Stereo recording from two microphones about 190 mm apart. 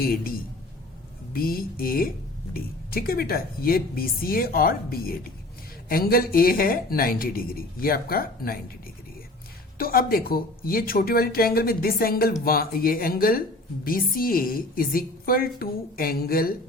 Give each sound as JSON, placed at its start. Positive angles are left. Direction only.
{"t": 0.0, "sound": "speech", "side_deg": 50}
{"t": 9.7, "sound": "speech", "side_deg": 50}